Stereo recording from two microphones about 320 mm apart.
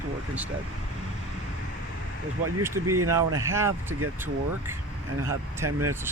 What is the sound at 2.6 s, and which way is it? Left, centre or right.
Speech, centre.